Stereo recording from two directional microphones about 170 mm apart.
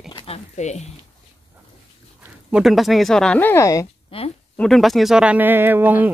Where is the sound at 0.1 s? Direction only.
35° left (ahead or behind).